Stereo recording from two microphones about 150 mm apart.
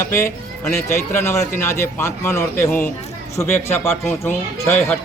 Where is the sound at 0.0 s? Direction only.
20° left (ahead or behind).